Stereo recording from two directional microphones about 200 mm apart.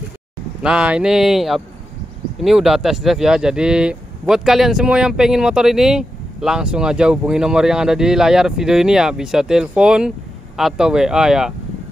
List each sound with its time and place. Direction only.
0.6 s speech: 5° right (ahead or behind)